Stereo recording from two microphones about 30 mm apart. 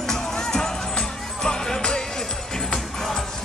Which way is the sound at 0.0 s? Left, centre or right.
Centre.